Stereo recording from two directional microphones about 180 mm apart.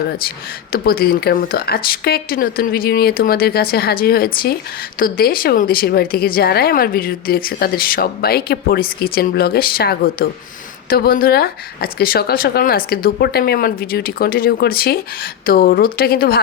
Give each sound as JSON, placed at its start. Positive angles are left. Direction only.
{"t": 0.7, "sound": "speech", "side_deg": 55}